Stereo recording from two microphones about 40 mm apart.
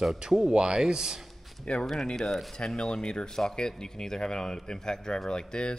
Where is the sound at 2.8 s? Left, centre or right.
Left.